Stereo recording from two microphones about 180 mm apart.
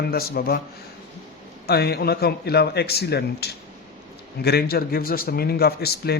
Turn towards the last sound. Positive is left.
turn(degrees=60)  # may be behind; listen again after turning